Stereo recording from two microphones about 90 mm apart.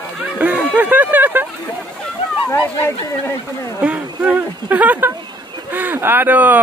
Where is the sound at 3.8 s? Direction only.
15° right (ahead or behind).